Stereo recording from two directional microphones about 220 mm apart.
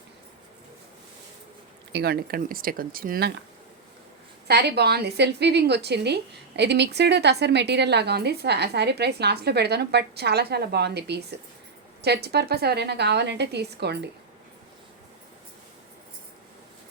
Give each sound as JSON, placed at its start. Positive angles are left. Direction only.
{"t": 1.9, "sound": "speech", "side_deg": -45}
{"t": 4.4, "sound": "a woman's voice", "side_deg": -45}